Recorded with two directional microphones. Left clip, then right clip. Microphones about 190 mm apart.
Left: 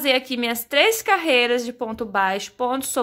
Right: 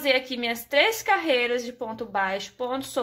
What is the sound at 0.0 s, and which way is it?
A woman's voice, 30° left (ahead or behind).